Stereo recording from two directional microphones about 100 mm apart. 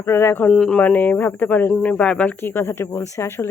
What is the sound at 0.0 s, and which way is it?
Speech, 25° left (ahead or behind).